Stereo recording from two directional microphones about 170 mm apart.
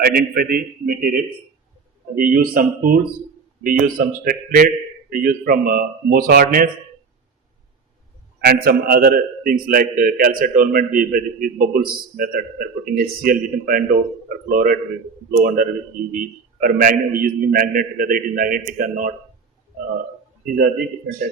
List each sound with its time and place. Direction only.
0.0 s a man's voice: 60° right (ahead or behind)
2.1 s a man's voice: 55° right (ahead or behind)
8.4 s a man's voice: 65° right (ahead or behind)